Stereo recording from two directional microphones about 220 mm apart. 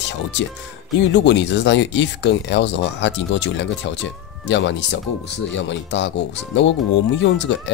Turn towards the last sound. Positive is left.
turn(degrees=55)  # may be behind; listen again after turning